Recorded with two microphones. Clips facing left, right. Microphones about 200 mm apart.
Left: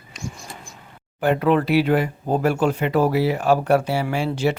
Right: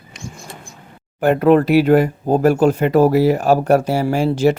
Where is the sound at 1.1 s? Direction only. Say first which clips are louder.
Right 6 dB; 45° right (ahead or behind).